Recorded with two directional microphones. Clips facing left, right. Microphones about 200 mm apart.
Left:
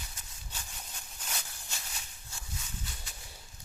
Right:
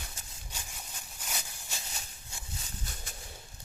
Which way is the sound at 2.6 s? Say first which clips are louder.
Right 1 dB; 45° right (ahead or behind).